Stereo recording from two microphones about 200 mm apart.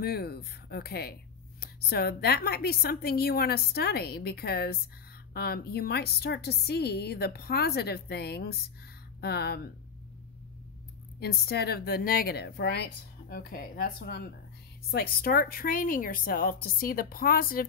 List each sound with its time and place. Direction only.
0.0 s a woman's voice: 50° left (ahead or behind)
11.1 s a woman's voice: 55° left (ahead or behind)